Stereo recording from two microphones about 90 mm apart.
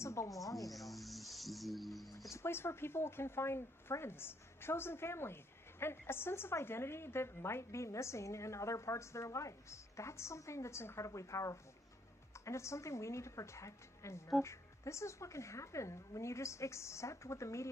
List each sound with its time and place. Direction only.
0.0 s speech: 35° left (ahead or behind)
0.7 s speech: centre (ahead or behind)
2.3 s a woman's voice: 25° left (ahead or behind)